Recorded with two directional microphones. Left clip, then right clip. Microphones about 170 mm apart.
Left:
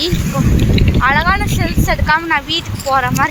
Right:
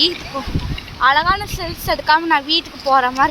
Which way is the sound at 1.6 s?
Centre (ahead or behind).